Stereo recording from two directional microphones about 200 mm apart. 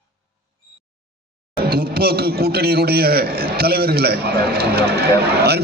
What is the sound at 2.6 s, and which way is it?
A man's voice, 50° right (ahead or behind).